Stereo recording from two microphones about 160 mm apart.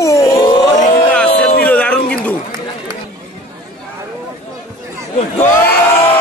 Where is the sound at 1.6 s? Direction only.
10° left (ahead or behind).